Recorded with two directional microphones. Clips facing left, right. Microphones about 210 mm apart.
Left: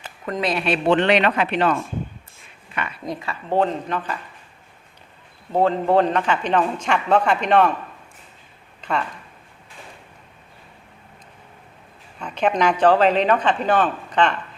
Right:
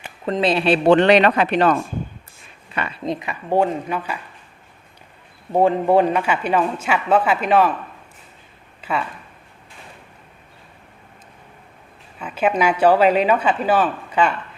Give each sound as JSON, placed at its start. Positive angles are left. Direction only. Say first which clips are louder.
{"t": 0.3, "sound": "speech", "louder": "right 5 dB", "side_deg": -30}
{"t": 2.7, "sound": "a man's voice", "louder": "right 4 dB", "side_deg": -30}
{"t": 5.5, "sound": "a man's voice", "louder": "right 2 dB", "side_deg": -15}
{"t": 8.8, "sound": "speech", "louder": "even", "side_deg": -5}
{"t": 12.2, "sound": "a man's voice", "louder": "right 1 dB", "side_deg": -5}